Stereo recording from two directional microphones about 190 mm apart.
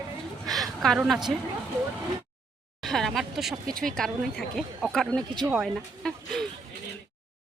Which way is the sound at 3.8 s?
Centre (ahead or behind).